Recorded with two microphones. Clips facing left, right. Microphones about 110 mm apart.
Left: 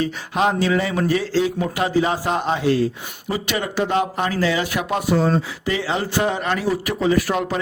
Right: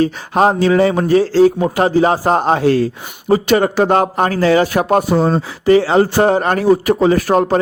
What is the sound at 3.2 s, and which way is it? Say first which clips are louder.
Speech: right 12 dB; 40° right (ahead or behind).